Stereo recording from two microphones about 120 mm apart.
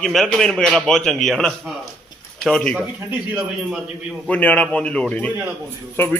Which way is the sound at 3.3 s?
10° right (ahead or behind).